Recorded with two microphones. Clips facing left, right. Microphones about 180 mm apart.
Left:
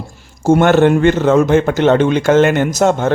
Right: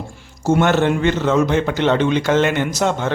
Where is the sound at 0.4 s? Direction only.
50° left (ahead or behind).